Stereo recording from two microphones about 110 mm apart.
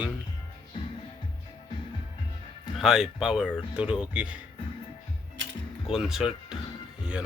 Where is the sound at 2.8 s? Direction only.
5° right (ahead or behind).